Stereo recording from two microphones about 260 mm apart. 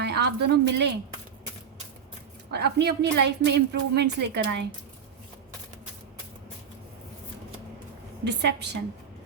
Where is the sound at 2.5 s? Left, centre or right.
Right.